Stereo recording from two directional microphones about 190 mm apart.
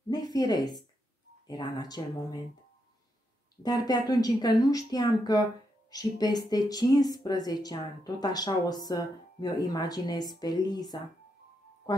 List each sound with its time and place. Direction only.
0.1 s a sound: 20° left (ahead or behind)
1.5 s speech: 20° left (ahead or behind)
3.6 s speech: 20° left (ahead or behind)